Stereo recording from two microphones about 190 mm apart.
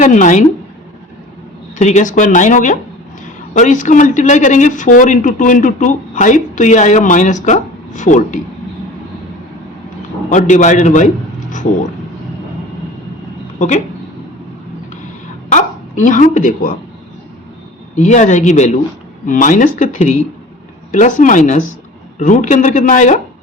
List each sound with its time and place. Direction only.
0.0 s speech: 40° left (ahead or behind)
1.8 s speech: 40° left (ahead or behind)
10.2 s speech: 40° left (ahead or behind)
15.5 s speech: 40° left (ahead or behind)
17.9 s speech: 40° left (ahead or behind)